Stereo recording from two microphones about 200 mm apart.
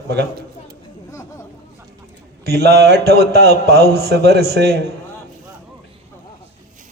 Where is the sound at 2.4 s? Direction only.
55° right (ahead or behind).